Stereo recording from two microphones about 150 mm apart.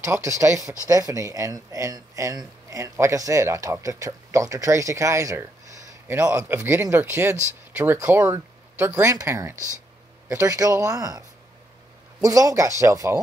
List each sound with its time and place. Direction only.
0.0 s speech: 20° right (ahead or behind)